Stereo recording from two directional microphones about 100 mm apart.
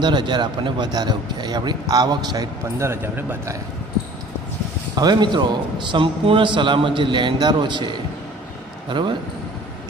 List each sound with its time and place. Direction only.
0.0 s a man's voice: 50° right (ahead or behind)
2.8 s a man's voice: 25° right (ahead or behind)
4.9 s a man's voice: 45° right (ahead or behind)